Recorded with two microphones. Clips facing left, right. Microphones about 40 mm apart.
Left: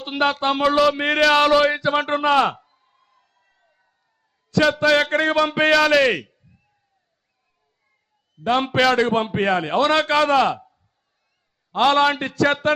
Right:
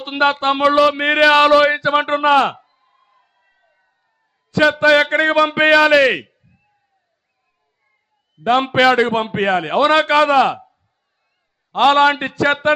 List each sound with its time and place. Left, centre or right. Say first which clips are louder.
0.0 s a man's voice: right 4 dB; right
8.4 s a man's voice: right 4 dB; right
11.8 s a man's voice: right 4 dB; right